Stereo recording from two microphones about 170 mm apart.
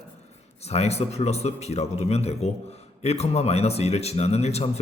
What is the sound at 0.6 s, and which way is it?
A man's voice, 40° left (ahead or behind).